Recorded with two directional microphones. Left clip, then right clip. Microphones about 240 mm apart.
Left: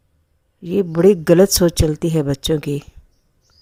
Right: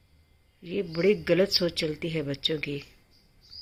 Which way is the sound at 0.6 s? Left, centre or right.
Left.